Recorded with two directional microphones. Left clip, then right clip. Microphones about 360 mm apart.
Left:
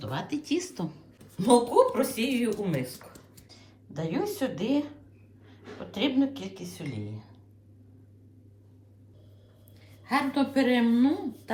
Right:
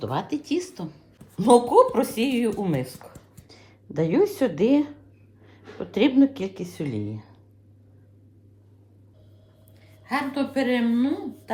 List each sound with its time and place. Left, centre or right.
0.0 s speech: centre
1.5 s speech: centre
3.9 s speech: centre
5.9 s speech: centre
10.1 s a woman's voice: centre